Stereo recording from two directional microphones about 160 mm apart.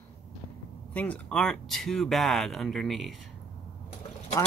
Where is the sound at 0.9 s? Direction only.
10° left (ahead or behind).